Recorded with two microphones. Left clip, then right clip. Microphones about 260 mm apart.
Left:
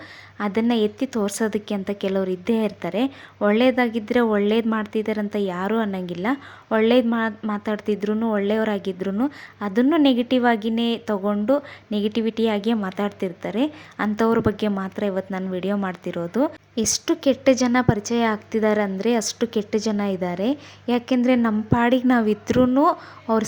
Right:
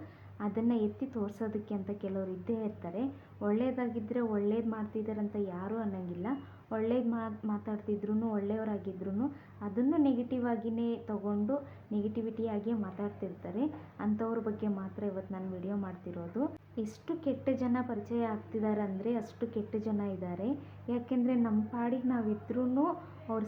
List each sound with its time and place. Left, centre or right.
0.3 s a woman's voice: left